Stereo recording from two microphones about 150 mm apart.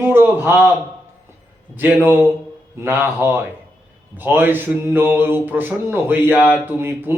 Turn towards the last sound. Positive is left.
turn(degrees=-15)  # may be behind; listen again after turning